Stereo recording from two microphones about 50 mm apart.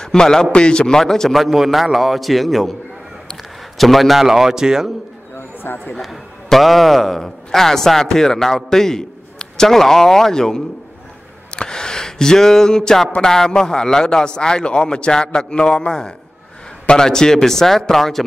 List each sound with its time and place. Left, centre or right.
0.0 s a man's voice: centre
3.7 s a man's voice: centre
5.6 s speech: left
5.9 s a man's voice: centre